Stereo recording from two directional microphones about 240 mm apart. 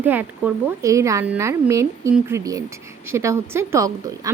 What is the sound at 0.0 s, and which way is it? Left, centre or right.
A woman's voice, centre.